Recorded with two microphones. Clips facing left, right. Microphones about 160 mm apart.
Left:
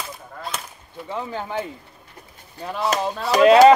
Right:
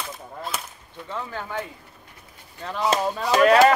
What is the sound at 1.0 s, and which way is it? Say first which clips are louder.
Speech: left 3 dB; 20° left (ahead or behind).